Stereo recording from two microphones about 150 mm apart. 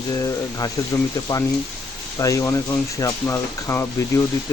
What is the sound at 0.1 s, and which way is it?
Speech, 25° left (ahead or behind).